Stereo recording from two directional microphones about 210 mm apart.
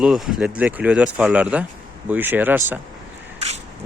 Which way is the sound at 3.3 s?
30° right (ahead or behind).